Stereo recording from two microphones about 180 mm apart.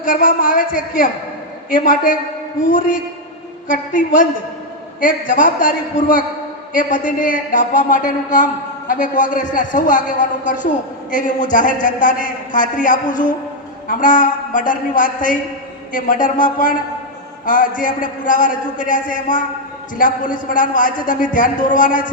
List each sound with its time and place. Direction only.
0.0 s a woman's voice: 50° left (ahead or behind)
5.3 s a woman's voice: 50° left (ahead or behind)